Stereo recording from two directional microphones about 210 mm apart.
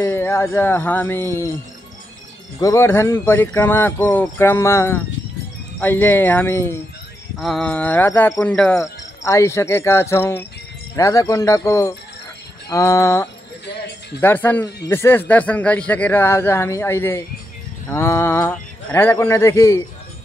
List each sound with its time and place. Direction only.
0.0 s speech: 10° left (ahead or behind)
2.6 s speech: 15° left (ahead or behind)
7.3 s speech: centre (ahead or behind)